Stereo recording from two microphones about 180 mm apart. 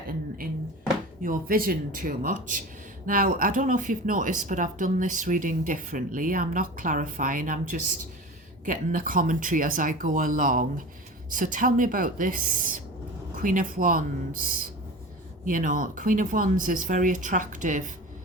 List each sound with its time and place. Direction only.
1.2 s speech: 50° right (ahead or behind)